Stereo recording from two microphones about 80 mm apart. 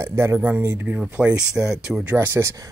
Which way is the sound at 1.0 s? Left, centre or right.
Centre.